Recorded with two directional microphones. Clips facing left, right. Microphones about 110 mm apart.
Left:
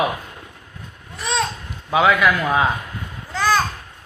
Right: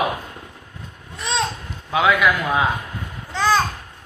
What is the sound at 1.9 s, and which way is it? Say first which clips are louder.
Speech: left 1 dB; centre (ahead or behind).